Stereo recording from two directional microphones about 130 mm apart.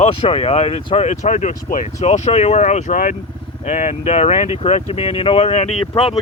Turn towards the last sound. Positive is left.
turn(degrees=45)  # may be behind; listen again after turning